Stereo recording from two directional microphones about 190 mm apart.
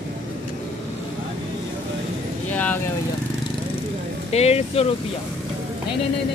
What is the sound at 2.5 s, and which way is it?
Speech, 10° left (ahead or behind).